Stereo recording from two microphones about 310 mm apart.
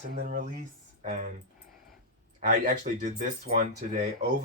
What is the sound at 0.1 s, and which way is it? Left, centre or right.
Speech, right.